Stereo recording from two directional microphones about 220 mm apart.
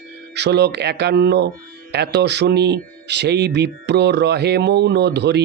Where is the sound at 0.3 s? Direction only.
50° right (ahead or behind).